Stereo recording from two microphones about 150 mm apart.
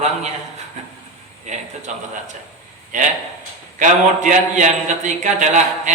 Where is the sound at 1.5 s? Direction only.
50° right (ahead or behind).